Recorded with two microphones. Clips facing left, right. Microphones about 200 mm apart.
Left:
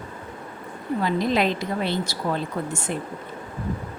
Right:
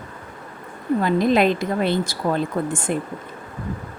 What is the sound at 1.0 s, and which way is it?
A woman's voice, 50° right (ahead or behind).